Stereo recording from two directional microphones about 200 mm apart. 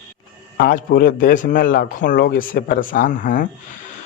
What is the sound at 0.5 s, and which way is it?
Speech, 45° left (ahead or behind).